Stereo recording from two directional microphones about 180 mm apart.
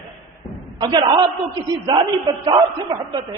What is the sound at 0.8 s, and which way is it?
A woman's voice, 25° right (ahead or behind).